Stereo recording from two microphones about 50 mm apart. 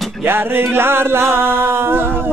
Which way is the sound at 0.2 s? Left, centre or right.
Right.